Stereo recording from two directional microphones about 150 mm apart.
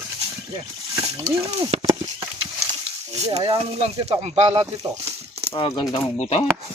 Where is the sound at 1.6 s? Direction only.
40° right (ahead or behind).